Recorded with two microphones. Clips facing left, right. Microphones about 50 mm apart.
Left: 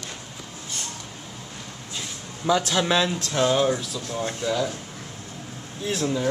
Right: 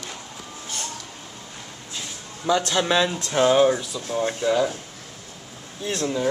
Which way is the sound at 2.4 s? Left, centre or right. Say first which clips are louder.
Even; centre.